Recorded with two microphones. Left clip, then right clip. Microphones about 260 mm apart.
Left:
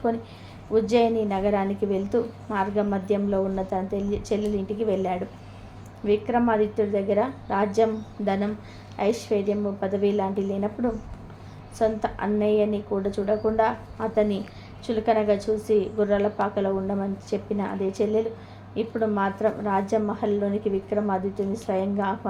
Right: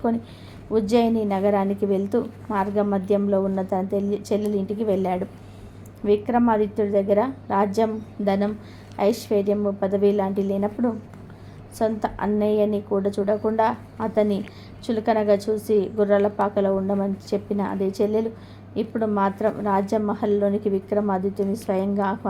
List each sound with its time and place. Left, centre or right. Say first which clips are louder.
0.7 s a woman's voice: even; right